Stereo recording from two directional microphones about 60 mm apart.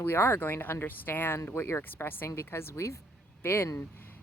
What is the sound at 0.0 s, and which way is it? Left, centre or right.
Speech, left.